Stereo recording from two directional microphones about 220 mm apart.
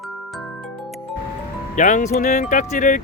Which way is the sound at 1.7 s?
35° left (ahead or behind).